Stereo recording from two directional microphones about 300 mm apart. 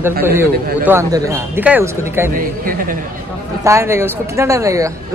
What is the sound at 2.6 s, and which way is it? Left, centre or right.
Speech, right.